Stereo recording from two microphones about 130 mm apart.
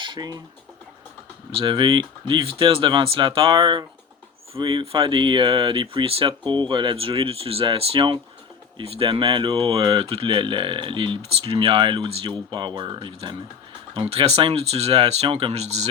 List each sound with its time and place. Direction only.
0.0 s speech: 35° right (ahead or behind)
1.5 s speech: 40° right (ahead or behind); by 15.9 s 55° right (ahead or behind)